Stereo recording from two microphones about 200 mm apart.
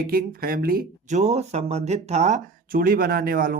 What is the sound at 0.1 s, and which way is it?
Speech, 45° right (ahead or behind).